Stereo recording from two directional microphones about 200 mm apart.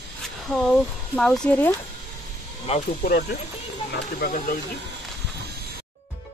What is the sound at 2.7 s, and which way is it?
Speech, 30° left (ahead or behind).